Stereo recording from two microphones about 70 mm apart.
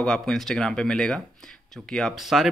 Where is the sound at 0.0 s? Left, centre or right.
Centre.